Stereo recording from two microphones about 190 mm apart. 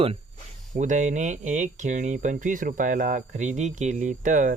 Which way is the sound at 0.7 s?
40° right (ahead or behind).